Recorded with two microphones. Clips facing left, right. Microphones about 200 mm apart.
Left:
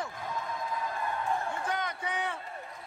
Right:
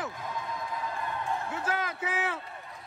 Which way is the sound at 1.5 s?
90° right.